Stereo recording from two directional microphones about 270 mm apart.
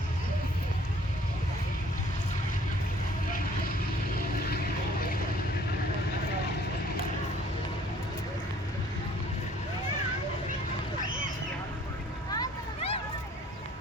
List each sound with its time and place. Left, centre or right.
12.3 s vehicle: centre